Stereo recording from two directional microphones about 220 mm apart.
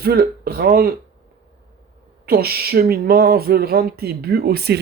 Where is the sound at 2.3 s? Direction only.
45° right (ahead or behind).